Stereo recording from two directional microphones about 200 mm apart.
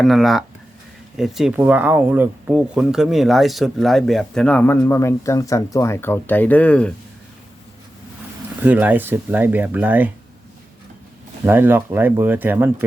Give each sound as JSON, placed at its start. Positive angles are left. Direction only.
{"t": 0.0, "sound": "speech", "side_deg": 0}
{"t": 8.6, "sound": "speech", "side_deg": -10}
{"t": 11.4, "sound": "speech", "side_deg": -10}